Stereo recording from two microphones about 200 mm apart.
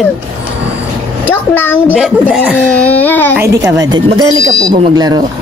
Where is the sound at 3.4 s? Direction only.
15° right (ahead or behind).